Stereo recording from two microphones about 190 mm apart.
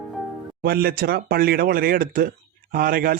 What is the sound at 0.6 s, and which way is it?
Speech, 50° right (ahead or behind).